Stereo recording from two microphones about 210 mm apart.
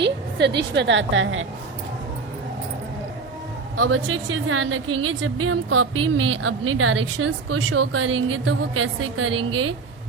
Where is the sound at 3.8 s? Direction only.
80° right.